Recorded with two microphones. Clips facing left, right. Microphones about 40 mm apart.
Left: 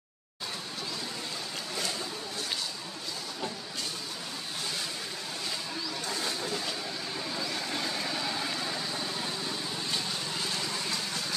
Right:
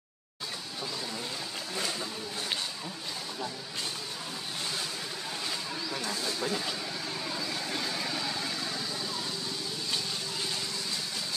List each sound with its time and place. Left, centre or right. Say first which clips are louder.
6.4 s a sound: right 2 dB; centre
7.2 s vehicle: left 2 dB; centre
9.0 s vehicle: left 1 dB; left